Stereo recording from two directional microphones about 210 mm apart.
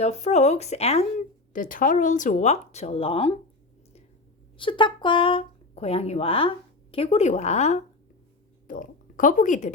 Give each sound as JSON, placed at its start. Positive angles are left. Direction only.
{"t": 0.0, "sound": "speech", "side_deg": 30}
{"t": 4.5, "sound": "speech", "side_deg": 25}